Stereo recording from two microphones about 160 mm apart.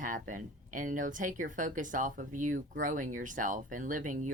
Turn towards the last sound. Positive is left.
turn(degrees=-55)  # may be behind; listen again after turning